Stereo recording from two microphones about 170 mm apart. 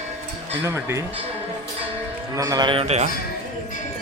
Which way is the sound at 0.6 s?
15° right (ahead or behind).